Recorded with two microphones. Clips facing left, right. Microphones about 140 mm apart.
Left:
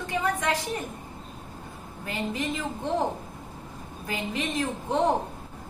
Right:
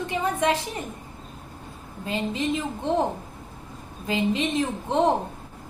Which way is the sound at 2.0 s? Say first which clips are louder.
Right 3 dB; 20° right (ahead or behind).